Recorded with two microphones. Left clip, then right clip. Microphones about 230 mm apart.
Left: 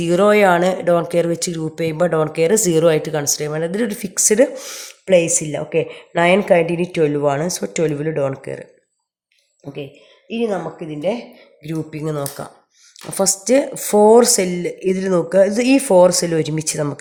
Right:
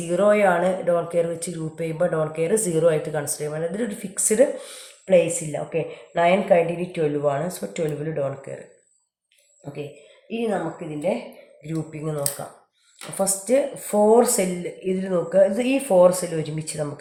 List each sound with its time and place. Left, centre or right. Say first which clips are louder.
0.0 s speech: left 5 dB; left
10.2 s speech: left 4 dB; left